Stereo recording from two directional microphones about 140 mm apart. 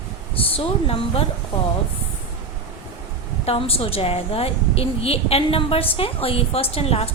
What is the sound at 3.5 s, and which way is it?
A woman's voice, 45° left (ahead or behind).